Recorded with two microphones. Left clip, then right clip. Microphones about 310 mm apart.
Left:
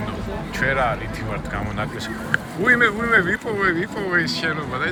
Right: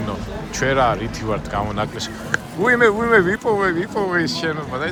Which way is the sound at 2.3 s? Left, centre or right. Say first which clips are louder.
Even; centre.